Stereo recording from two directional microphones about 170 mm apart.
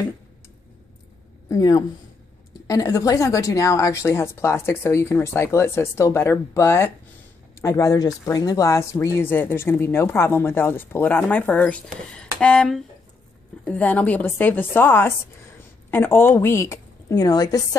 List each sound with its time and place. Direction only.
1.5 s a woman's voice: 20° left (ahead or behind)